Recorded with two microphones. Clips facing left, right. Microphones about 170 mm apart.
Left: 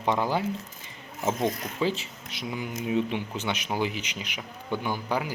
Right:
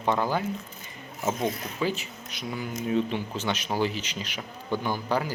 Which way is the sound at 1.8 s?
25° left (ahead or behind).